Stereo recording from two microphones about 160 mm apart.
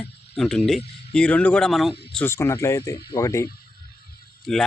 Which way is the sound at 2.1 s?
15° left (ahead or behind).